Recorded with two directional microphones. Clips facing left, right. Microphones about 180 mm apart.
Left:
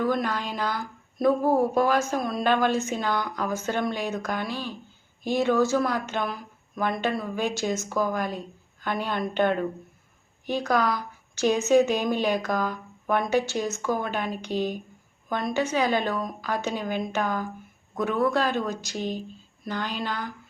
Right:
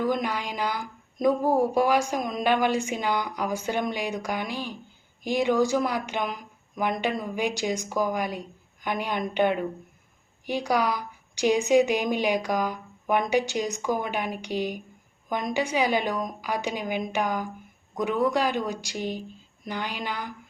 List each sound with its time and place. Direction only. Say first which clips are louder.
0.0 s speech: left 1 dB; 15° right (ahead or behind)